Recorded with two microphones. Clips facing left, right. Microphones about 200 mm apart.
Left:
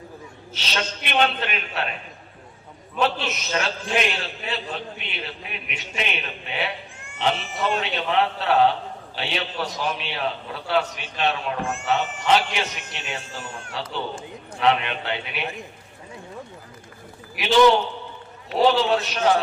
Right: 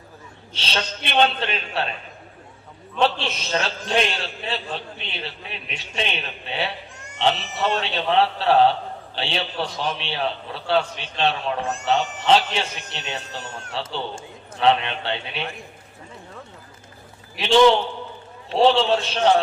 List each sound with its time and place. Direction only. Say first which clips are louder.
0.5 s a man's voice: right 1 dB; 30° right (ahead or behind)
3.0 s a man's voice: right 2 dB; 30° right (ahead or behind)
17.3 s a man's voice: right 1 dB; 30° right (ahead or behind)